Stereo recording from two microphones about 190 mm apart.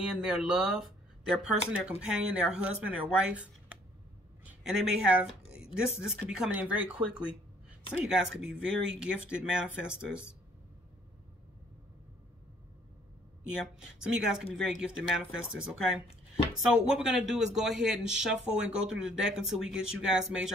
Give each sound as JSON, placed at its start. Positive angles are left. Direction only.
{"t": 0.0, "sound": "speech", "side_deg": -5}
{"t": 13.6, "sound": "speech", "side_deg": -5}